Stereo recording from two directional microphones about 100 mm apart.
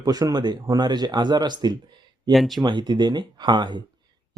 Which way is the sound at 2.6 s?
50° right (ahead or behind).